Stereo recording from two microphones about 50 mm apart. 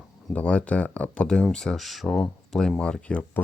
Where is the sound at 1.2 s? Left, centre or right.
Centre.